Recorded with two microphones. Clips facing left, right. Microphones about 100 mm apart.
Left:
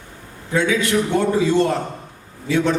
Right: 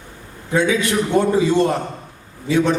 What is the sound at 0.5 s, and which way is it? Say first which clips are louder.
A man's voice: right 1 dB; 20° right (ahead or behind).